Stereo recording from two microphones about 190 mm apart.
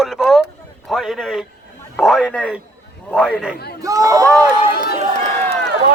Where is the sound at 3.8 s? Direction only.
15° right (ahead or behind).